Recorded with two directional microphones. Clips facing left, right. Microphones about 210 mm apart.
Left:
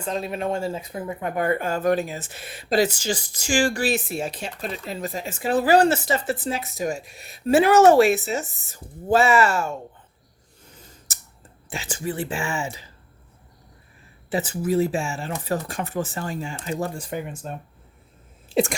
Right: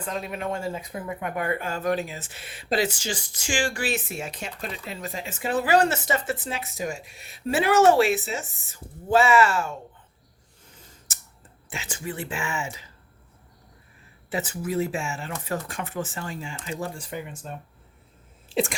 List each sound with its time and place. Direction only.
0.0 s speech: 30° left (ahead or behind)
11.7 s speech: 35° left (ahead or behind)
14.3 s speech: 30° left (ahead or behind)
18.4 s a sound: 45° left (ahead or behind)